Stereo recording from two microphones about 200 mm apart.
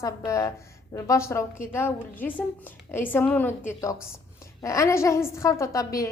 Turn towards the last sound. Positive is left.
turn(degrees=15)  # may be behind; listen again after turning